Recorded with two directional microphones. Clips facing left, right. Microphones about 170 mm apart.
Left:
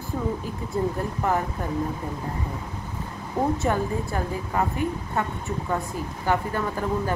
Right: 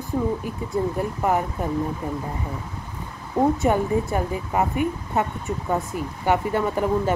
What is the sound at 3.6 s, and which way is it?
A woman's voice, 15° right (ahead or behind).